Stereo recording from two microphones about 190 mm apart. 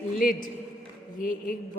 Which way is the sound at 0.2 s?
45° left (ahead or behind).